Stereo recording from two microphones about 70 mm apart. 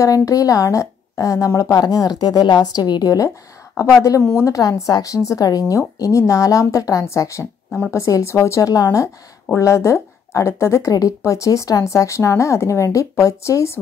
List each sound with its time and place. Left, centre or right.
0.0 s a woman's voice: left
4.4 s speech: left
10.9 s speech: left